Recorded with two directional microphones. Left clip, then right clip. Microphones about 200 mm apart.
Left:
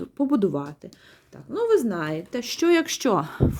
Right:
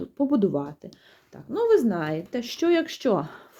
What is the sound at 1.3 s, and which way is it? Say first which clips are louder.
Speech: right 1 dB; centre (ahead or behind).